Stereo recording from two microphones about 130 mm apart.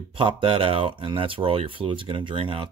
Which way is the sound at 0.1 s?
45° right (ahead or behind).